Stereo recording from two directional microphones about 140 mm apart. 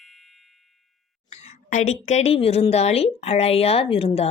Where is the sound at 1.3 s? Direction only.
50° left (ahead or behind).